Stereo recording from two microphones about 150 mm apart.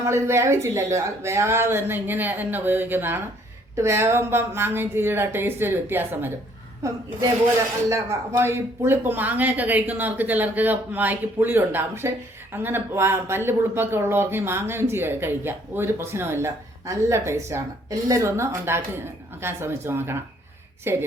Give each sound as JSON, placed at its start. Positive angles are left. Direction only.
{"t": 0.0, "sound": "speech", "side_deg": -20}
{"t": 7.9, "sound": "speech", "side_deg": -20}